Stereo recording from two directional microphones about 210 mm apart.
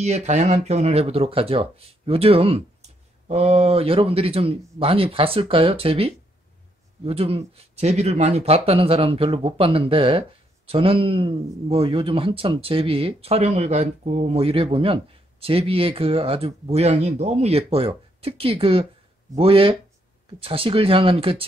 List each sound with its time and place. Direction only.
0.0 s speech: 30° right (ahead or behind)